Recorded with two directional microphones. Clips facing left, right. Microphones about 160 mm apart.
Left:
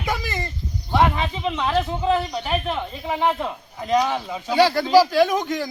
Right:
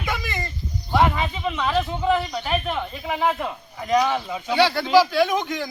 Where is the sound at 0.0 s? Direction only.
35° left (ahead or behind).